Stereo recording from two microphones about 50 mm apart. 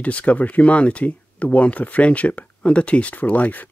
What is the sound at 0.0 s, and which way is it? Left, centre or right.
Speech, left.